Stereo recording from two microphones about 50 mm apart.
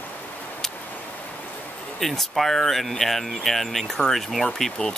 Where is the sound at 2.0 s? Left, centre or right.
Centre.